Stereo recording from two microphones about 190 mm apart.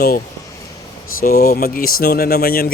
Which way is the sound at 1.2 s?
50° left (ahead or behind).